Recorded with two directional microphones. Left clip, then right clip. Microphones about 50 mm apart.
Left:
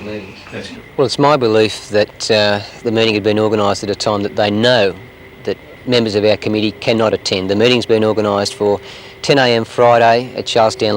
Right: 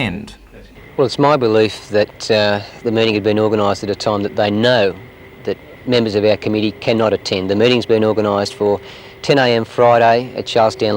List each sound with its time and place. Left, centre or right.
0.9 s speech: left